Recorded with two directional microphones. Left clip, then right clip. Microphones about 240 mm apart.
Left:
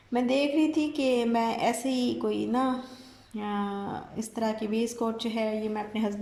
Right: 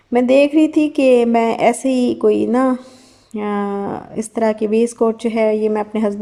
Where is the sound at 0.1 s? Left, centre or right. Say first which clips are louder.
Right 14 dB; right.